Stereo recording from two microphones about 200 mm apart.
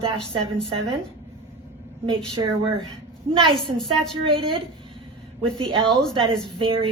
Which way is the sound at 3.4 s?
25° right (ahead or behind).